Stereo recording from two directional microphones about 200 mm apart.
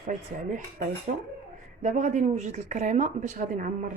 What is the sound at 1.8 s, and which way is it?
Speech, 40° right (ahead or behind).